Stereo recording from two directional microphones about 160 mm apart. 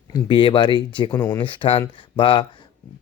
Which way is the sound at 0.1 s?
30° left (ahead or behind).